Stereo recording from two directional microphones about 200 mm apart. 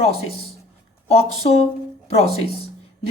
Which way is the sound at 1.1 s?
30° left (ahead or behind).